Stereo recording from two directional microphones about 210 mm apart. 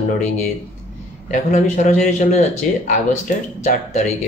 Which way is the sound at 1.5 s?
35° left (ahead or behind).